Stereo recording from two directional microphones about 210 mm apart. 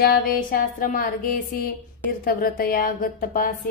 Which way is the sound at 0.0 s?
45° left (ahead or behind).